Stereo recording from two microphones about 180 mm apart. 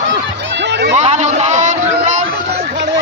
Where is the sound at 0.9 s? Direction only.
40° right (ahead or behind).